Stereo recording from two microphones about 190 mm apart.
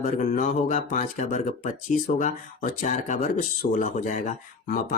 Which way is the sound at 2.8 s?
40° left (ahead or behind).